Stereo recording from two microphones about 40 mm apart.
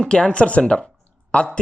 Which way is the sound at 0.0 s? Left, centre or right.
Left.